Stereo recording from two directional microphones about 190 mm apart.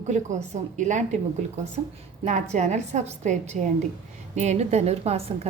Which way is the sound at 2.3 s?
40° right (ahead or behind).